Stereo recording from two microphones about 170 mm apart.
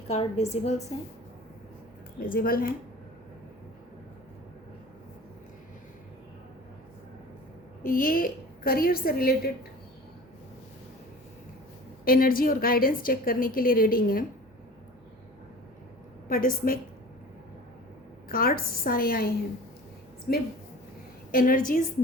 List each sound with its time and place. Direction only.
0.1 s a woman's voice: 40° left (ahead or behind)
2.2 s a woman's voice: 60° left (ahead or behind)
7.9 s a woman's voice: 55° left (ahead or behind)
12.0 s a woman's voice: 55° left (ahead or behind)
16.3 s a woman's voice: 55° left (ahead or behind)
18.3 s a woman's voice: 60° left (ahead or behind)